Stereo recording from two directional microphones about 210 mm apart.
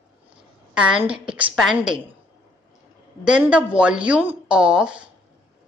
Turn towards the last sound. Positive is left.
turn(degrees=-5)  # may be behind; listen again after turning